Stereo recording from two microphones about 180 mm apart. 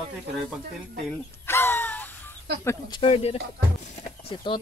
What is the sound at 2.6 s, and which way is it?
Speech, 15° left (ahead or behind).